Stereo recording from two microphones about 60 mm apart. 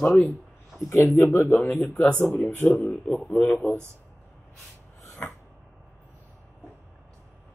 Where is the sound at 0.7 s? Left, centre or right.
Left.